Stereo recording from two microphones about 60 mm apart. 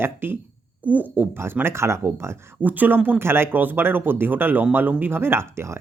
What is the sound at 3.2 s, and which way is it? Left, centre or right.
A man's voice, right.